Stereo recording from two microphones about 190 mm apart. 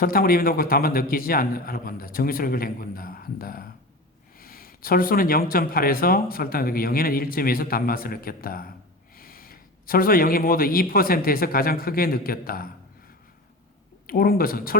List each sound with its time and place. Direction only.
0.0 s speech: 50° left (ahead or behind)
14.1 s speech: 50° left (ahead or behind)